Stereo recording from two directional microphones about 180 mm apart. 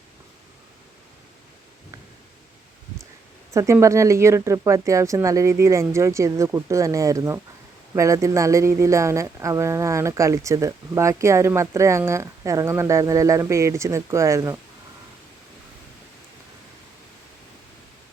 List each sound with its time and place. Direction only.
3.5 s speech: 15° right (ahead or behind)